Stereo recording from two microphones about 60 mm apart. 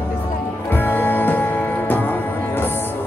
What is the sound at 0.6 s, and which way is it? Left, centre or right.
Music, left.